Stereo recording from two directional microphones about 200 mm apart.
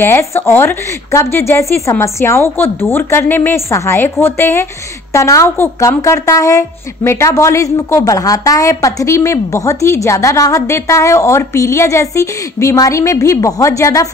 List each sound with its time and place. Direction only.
0.0 s a woman's voice: 10° left (ahead or behind)